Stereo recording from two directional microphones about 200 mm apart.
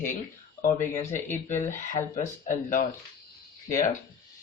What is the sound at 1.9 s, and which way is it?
Speech, 40° left (ahead or behind).